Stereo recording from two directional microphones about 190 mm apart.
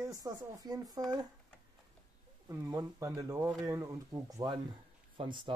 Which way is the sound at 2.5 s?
15° right (ahead or behind).